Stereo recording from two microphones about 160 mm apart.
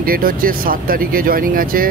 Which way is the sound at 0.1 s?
65° right (ahead or behind).